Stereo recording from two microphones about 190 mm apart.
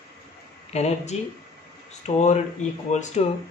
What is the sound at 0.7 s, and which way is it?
Speech, 35° left (ahead or behind).